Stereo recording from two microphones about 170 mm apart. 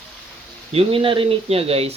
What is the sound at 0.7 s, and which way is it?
Speech, 30° right (ahead or behind).